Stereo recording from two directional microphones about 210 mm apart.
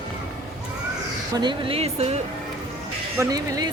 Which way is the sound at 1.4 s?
25° right (ahead or behind).